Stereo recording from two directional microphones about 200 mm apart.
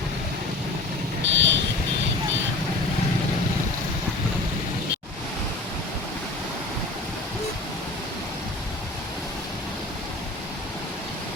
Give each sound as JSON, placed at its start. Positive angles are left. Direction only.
{"t": 1.3, "sound": "vehicle", "side_deg": -65}